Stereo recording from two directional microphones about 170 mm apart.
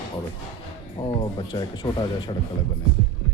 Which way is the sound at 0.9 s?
25° left (ahead or behind).